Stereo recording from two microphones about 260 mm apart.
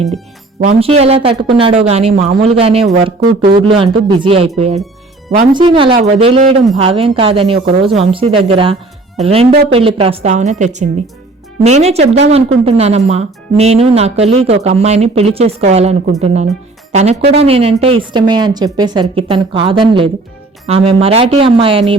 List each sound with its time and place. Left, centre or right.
0.6 s speech: right